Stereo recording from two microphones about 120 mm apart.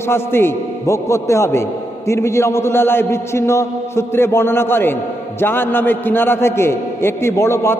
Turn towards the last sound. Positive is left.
turn(degrees=20)  # may be behind; listen again after turning